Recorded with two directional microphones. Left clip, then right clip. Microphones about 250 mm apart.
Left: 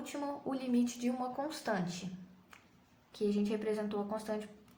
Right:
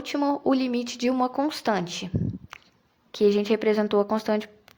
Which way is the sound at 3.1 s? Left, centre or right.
Right.